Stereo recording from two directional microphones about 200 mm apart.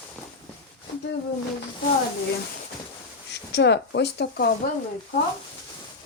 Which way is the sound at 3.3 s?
60° left (ahead or behind).